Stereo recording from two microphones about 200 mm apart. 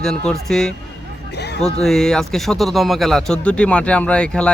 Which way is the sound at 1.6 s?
Centre (ahead or behind).